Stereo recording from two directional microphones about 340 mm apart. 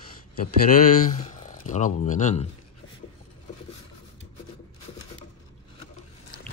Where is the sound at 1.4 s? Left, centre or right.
Left.